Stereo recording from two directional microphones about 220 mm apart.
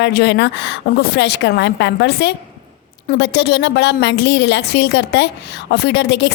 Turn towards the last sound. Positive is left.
turn(degrees=50)  # may be behind; listen again after turning